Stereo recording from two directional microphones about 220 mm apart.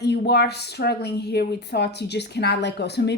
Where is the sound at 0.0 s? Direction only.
50° left (ahead or behind).